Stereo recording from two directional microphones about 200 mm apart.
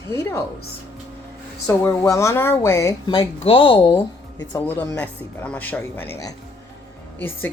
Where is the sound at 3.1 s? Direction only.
25° left (ahead or behind).